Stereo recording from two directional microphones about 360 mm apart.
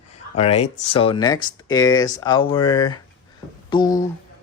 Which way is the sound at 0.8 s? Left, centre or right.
Centre.